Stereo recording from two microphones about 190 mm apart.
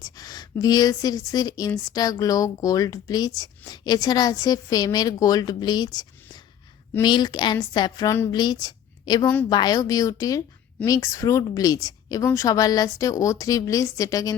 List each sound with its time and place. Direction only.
0.0 s a woman's voice: 20° left (ahead or behind)
8.6 s a sound: 20° left (ahead or behind)
9.5 s a woman's voice: 20° left (ahead or behind)